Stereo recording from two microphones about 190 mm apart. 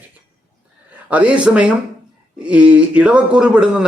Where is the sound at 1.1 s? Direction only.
5° right (ahead or behind).